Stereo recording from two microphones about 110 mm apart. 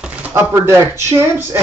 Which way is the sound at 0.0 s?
10° right (ahead or behind).